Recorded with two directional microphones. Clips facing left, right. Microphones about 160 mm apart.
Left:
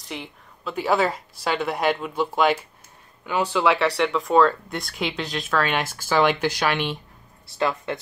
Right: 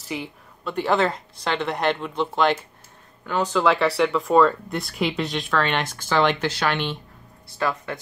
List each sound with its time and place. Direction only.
0.0 s speech: 5° right (ahead or behind)
7.5 s speech: 25° left (ahead or behind)